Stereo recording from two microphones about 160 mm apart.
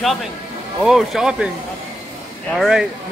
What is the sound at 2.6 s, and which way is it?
Speech, 5° right (ahead or behind).